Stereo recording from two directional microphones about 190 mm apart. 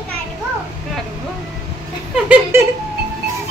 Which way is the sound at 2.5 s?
15° right (ahead or behind).